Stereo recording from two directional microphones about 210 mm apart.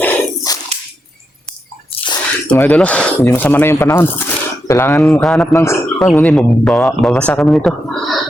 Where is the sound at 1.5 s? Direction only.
5° left (ahead or behind).